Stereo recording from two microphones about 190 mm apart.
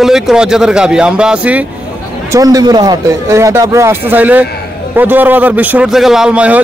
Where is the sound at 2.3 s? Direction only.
20° right (ahead or behind).